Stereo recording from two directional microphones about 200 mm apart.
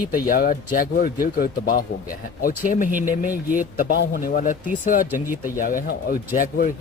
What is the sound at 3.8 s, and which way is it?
Speech, 50° left (ahead or behind).